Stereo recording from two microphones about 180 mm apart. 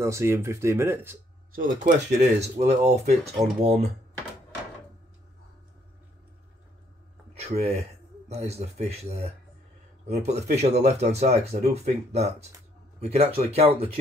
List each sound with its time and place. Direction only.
0.0 s speech: 15° right (ahead or behind)
1.6 s speech: 45° right (ahead or behind)
7.3 s a sound: 35° right (ahead or behind)
8.3 s speech: 35° right (ahead or behind)